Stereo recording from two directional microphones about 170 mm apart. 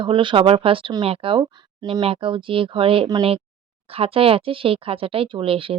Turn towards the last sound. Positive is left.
turn(degrees=-30)  # may be behind; listen again after turning